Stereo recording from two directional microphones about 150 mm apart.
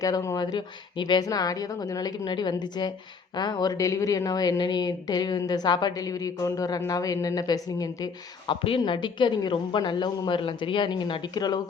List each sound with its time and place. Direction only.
0.0 s a woman's voice: 20° left (ahead or behind)